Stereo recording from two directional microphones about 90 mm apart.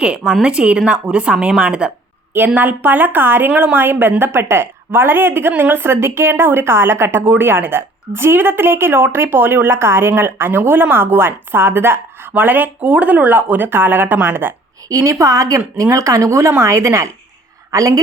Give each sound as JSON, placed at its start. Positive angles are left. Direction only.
{"t": 0.0, "sound": "a woman's voice", "side_deg": -10}
{"t": 14.8, "sound": "a woman's voice", "side_deg": -40}